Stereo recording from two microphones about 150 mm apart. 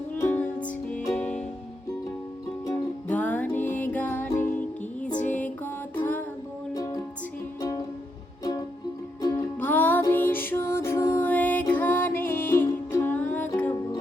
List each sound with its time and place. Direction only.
0.1 s music: 10° left (ahead or behind)
2.6 s music: 10° left (ahead or behind)
6.7 s music: 25° left (ahead or behind)
9.3 s music: 10° left (ahead or behind)